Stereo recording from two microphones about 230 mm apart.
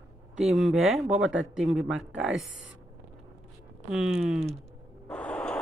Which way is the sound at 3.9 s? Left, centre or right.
Centre.